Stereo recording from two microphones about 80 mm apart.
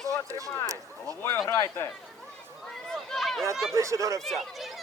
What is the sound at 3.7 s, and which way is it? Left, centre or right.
Speech, right.